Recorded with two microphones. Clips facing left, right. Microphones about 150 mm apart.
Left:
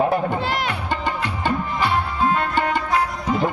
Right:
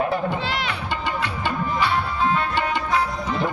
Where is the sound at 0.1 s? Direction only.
50° left (ahead or behind).